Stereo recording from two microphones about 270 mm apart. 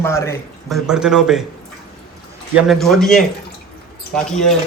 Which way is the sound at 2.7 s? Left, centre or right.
Centre.